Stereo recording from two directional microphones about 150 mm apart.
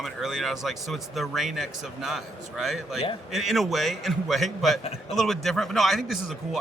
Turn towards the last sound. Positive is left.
turn(degrees=0)  # may be behind; listen again after turning